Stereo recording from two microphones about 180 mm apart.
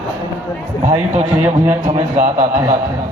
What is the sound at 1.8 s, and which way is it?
Speech, 40° right (ahead or behind).